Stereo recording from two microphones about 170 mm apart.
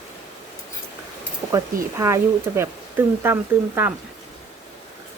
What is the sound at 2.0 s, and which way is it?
Speech, 15° right (ahead or behind).